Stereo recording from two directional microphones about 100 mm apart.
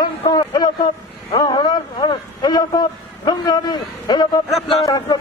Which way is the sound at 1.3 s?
45° left (ahead or behind).